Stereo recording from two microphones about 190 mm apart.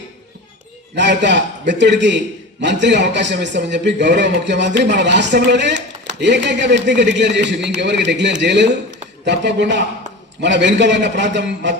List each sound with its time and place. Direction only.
0.9 s a man's voice: 70° right (ahead or behind)